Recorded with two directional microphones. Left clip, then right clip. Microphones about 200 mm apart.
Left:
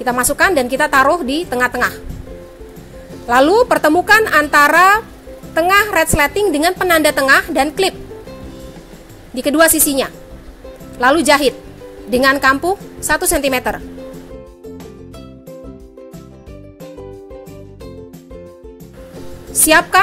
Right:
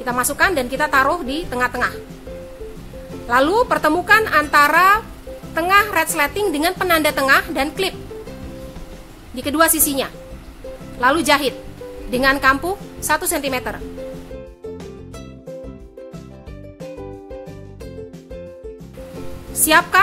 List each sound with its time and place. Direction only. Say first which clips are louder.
0.0 s a woman's voice: left 4 dB; 25° left (ahead or behind)
3.3 s a woman's voice: left 5 dB; 25° left (ahead or behind)
9.3 s a woman's voice: left 5 dB; 25° left (ahead or behind)
19.6 s a woman's voice: left 3 dB; 25° left (ahead or behind)